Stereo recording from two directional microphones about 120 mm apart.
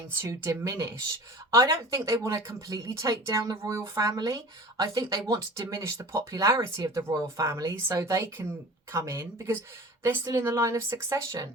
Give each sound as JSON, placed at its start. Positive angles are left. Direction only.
{"t": 0.2, "sound": "speech", "side_deg": -20}